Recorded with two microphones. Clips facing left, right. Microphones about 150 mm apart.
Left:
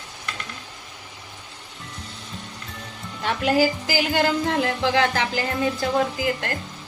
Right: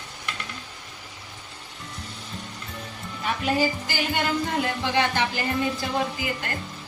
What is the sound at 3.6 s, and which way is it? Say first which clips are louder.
Music: left 4 dB; 90° left.